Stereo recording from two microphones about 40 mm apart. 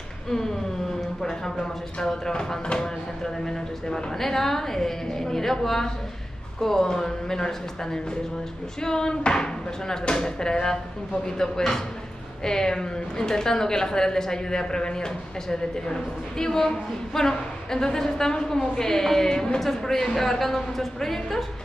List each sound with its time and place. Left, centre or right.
1.2 s a woman's voice: centre